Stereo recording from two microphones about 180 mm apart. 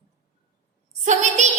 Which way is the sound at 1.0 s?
40° right (ahead or behind).